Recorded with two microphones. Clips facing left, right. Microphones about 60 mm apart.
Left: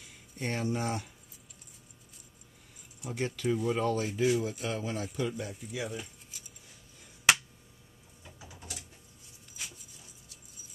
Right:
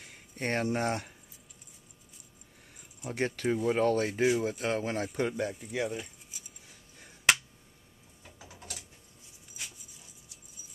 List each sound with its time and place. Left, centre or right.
0.0 s speech: right
3.0 s speech: right